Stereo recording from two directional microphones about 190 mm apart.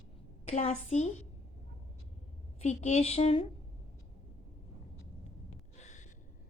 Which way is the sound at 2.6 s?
35° left (ahead or behind).